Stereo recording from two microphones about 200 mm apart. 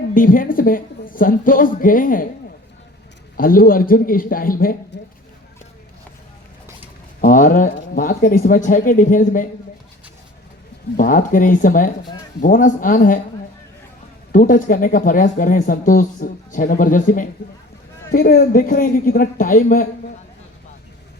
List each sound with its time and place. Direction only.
0.1 s speech: 45° left (ahead or behind)
3.3 s speech: 45° left (ahead or behind)
7.2 s speech: 40° left (ahead or behind)
10.9 s speech: 40° left (ahead or behind)
14.3 s speech: 45° left (ahead or behind)